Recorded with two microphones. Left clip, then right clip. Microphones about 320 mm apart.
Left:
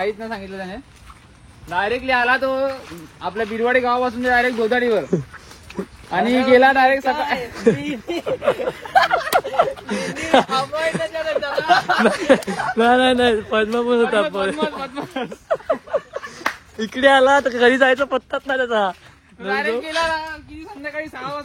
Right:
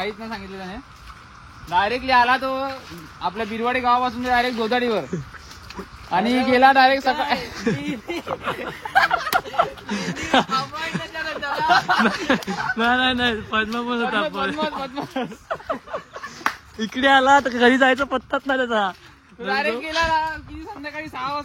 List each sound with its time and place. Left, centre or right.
0.0 s speech: centre
1.7 s speech: centre
6.0 s speech: centre
6.8 s speech: right
7.5 s speech: centre
14.6 s speech: right
15.4 s speech: centre
19.9 s speech: centre